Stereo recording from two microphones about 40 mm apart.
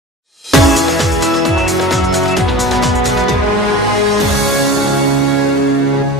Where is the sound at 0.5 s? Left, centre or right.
Centre.